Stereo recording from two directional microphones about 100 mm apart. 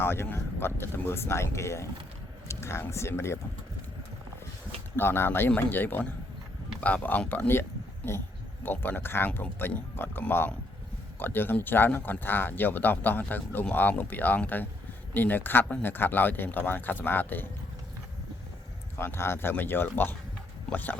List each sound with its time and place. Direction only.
0.0 s speech: 25° left (ahead or behind)
4.9 s speech: 25° left (ahead or behind)
18.9 s speech: 25° left (ahead or behind)